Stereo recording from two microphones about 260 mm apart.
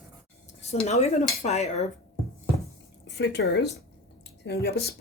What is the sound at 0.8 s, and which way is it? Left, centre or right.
Dishes, left.